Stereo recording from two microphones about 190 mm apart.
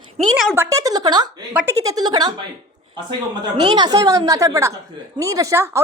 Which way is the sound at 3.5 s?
20° right (ahead or behind).